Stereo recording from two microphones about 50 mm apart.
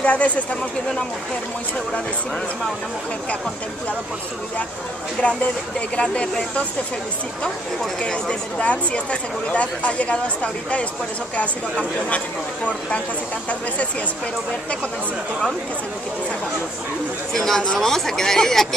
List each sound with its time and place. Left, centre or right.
0.0 s speech: left
5.8 s speech: left
8.0 s speech: left
17.3 s speech: centre